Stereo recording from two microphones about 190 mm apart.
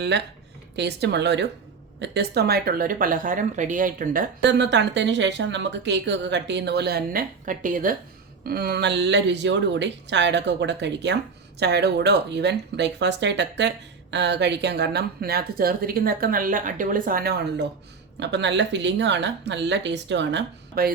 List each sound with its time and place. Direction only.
0.8 s speech: 65° right (ahead or behind); by 4.3 s 45° right (ahead or behind)
4.4 s speech: 65° right (ahead or behind)